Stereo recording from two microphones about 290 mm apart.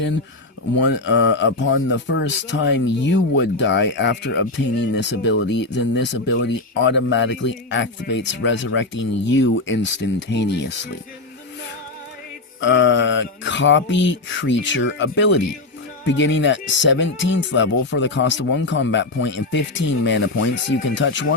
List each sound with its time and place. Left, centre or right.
0.8 s speech: left
12.5 s speech: left